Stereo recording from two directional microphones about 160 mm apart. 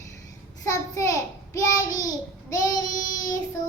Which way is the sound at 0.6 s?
20° left (ahead or behind).